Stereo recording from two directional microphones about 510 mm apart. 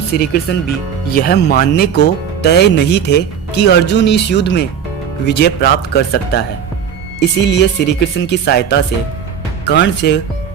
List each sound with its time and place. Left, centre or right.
0.1 s speech: centre